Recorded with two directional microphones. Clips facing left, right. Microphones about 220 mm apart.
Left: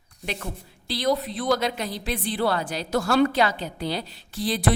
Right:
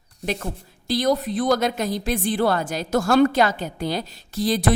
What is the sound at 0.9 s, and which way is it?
A woman's voice, 45° right (ahead or behind).